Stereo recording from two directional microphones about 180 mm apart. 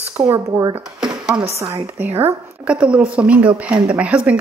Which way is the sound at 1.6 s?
15° right (ahead or behind).